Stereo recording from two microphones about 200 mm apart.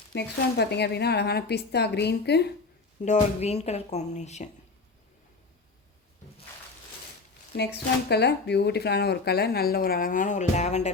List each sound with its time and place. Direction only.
0.1 s a woman's voice: 55° left (ahead or behind)
3.0 s speech: 35° left (ahead or behind)
8.1 s a woman's voice: 55° left (ahead or behind); by 10.9 s 35° left (ahead or behind)